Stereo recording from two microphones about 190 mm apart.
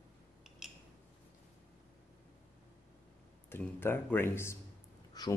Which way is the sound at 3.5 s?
10° left (ahead or behind).